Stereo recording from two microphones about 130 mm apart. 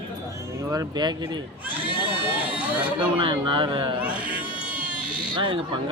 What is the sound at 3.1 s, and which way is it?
Speech, 40° right (ahead or behind).